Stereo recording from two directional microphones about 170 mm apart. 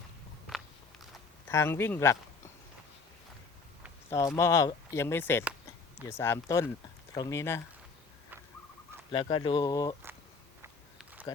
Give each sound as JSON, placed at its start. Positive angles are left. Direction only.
{"t": 0.4, "sound": "biting", "side_deg": 0}
{"t": 1.5, "sound": "speech", "side_deg": 15}
{"t": 4.4, "sound": "speech", "side_deg": 15}
{"t": 9.1, "sound": "speech", "side_deg": 30}
{"t": 10.9, "sound": "a sound", "side_deg": -10}